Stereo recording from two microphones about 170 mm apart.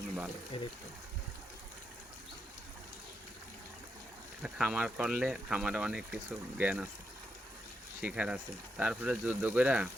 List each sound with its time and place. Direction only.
0.5 s speech: 35° left (ahead or behind)
4.4 s speech: 5° right (ahead or behind)
8.0 s speech: 5° right (ahead or behind)